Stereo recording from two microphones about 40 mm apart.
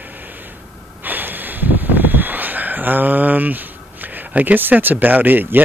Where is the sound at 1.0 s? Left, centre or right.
Right.